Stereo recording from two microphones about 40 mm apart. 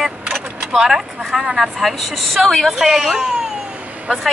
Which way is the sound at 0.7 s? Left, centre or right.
Centre.